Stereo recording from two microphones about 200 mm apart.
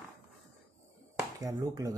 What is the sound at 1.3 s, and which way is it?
Speech, 15° right (ahead or behind).